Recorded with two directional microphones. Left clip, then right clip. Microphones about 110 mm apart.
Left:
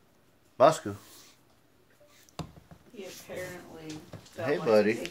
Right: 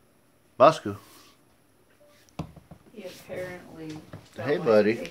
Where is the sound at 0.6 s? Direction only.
20° right (ahead or behind).